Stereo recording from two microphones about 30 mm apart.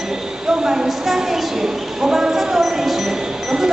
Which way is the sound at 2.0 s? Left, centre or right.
Right.